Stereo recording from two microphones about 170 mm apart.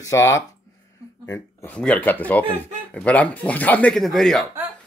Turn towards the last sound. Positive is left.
turn(degrees=0)  # may be behind; listen again after turning